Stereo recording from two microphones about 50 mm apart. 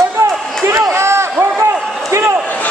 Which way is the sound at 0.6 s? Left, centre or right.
Right.